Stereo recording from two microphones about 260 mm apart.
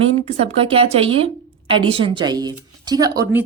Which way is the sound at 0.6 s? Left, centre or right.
Right.